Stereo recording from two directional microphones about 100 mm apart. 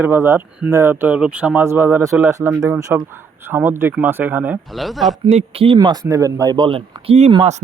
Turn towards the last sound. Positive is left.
turn(degrees=-80)